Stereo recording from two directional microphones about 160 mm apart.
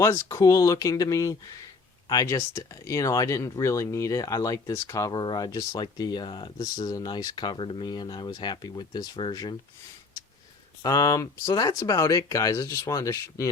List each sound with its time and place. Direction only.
0.0 s speech: 20° left (ahead or behind)
10.8 s speech: 20° left (ahead or behind)